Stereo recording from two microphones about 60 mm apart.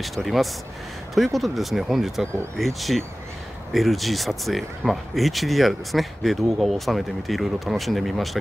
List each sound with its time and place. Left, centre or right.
0.0 s speech: centre